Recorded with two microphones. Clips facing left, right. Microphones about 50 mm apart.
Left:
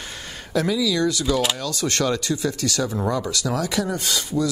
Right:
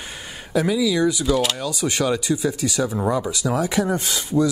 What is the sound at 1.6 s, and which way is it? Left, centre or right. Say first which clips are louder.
Speech: right 1 dB; centre.